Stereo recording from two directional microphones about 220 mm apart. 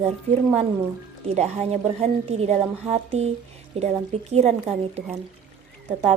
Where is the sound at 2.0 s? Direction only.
30° right (ahead or behind).